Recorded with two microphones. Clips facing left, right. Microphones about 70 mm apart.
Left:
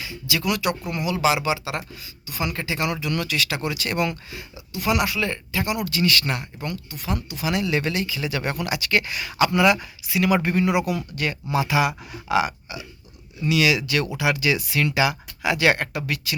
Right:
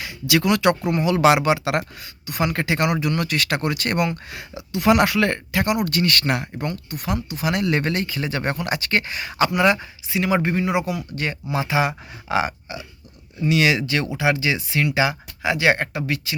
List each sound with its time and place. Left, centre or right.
0.0 s a sound: right
0.5 s speech: right
0.8 s speech: right
1.0 s speech: right
4.3 s speech: right
4.9 s speech: right
5.8 s speech: right